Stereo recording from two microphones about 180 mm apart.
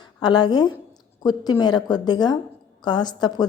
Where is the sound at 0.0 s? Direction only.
25° left (ahead or behind).